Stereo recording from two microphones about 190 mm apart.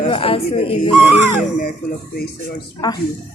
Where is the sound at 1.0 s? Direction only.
10° right (ahead or behind).